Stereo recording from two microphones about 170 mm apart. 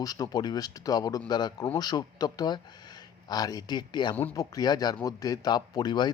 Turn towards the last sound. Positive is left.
turn(degrees=25)  # may be behind; listen again after turning